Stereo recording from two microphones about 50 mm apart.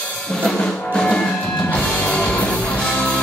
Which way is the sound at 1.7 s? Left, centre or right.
Left.